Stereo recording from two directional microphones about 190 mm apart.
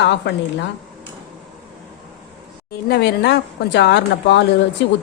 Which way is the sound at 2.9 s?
60° left (ahead or behind).